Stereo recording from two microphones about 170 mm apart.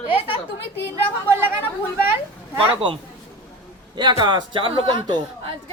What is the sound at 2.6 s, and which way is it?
Speech, 30° right (ahead or behind).